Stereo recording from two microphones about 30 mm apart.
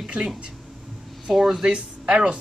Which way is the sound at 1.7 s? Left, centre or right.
Right.